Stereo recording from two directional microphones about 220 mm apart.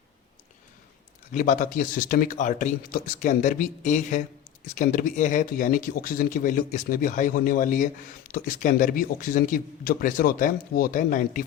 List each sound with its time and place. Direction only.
1.3 s a man's voice: 35° left (ahead or behind)